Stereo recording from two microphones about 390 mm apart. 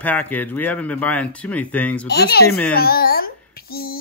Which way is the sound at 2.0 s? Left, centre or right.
Left.